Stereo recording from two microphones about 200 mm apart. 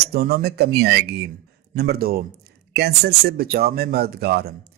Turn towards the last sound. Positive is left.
turn(degrees=-55)  # may be behind; listen again after turning